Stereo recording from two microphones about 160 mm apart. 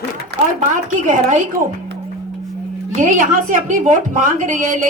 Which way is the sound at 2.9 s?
55° right (ahead or behind).